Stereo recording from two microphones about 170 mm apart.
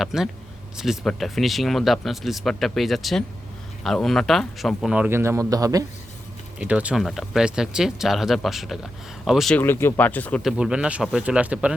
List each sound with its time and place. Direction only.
0.0 s speech: centre (ahead or behind); by 5.8 s 20° right (ahead or behind)
6.6 s speech: 10° right (ahead or behind)
9.6 s speech: 10° left (ahead or behind)
10.4 s speech: 5° right (ahead or behind)